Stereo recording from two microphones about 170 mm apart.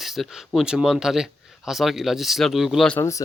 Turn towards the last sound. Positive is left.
turn(degrees=20)  # may be behind; listen again after turning